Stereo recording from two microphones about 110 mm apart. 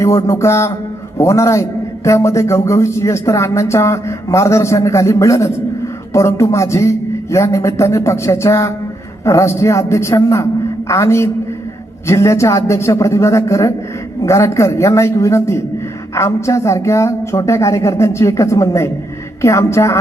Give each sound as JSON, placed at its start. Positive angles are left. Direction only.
{"t": 0.0, "sound": "speech", "side_deg": 25}